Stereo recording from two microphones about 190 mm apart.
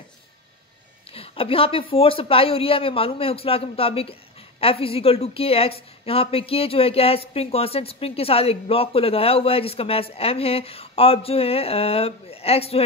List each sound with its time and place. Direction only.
1.1 s speech: 30° left (ahead or behind)